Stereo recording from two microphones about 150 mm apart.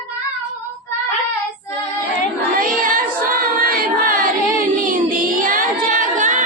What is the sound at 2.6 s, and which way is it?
Choir, 65° right (ahead or behind).